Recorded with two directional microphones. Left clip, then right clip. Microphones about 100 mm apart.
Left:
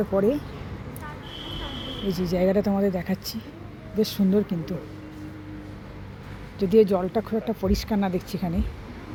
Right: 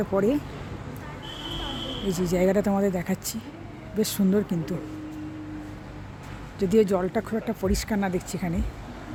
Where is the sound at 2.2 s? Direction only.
30° right (ahead or behind).